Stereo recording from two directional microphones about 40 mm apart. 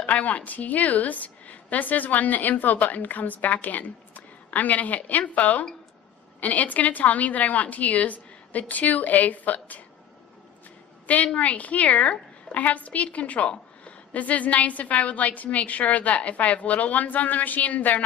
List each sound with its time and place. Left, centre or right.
0.0 s a woman's voice: left
11.3 s a woman's voice: left